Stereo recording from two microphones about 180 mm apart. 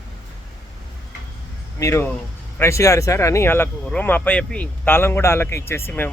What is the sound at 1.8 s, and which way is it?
Speech, 15° left (ahead or behind).